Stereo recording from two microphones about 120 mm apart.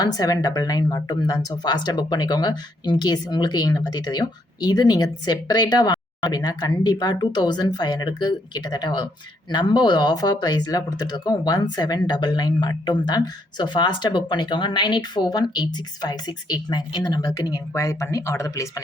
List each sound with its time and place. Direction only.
0.0 s speech: 30° left (ahead or behind)